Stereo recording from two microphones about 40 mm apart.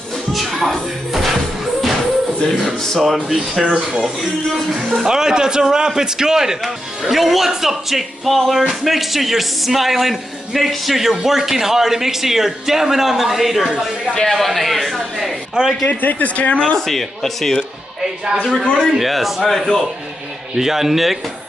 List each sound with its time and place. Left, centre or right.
0.3 s music: centre
2.5 s speech: centre
5.0 s speech: centre
6.6 s speech: centre
15.6 s speech: right
15.9 s speech: left
16.7 s speech: centre
18.9 s speech: centre